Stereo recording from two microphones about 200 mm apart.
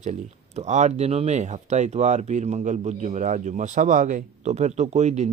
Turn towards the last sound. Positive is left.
turn(degrees=-35)  # may be behind; listen again after turning